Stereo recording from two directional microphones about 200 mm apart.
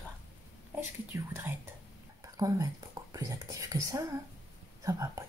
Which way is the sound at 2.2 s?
15° right (ahead or behind).